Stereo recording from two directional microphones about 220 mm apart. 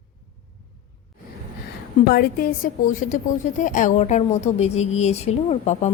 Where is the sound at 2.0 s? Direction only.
45° left (ahead or behind).